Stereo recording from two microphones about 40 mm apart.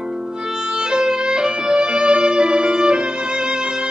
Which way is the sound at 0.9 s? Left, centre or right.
Right.